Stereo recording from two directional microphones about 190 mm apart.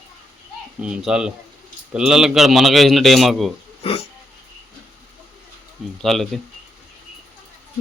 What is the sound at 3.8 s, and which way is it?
Speech, 30° left (ahead or behind).